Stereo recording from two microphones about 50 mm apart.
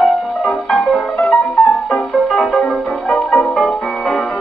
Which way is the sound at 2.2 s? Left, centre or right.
Centre.